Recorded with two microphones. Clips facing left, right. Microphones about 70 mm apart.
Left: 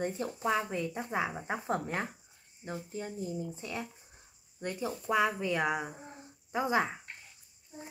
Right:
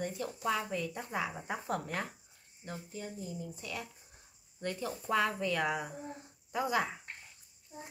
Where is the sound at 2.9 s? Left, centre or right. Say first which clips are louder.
Left 5 dB; left.